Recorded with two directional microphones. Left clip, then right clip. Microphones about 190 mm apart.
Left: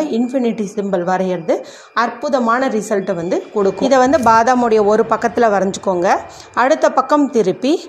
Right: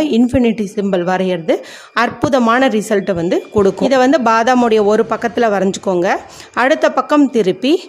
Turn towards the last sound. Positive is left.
turn(degrees=-20)  # may be behind; listen again after turning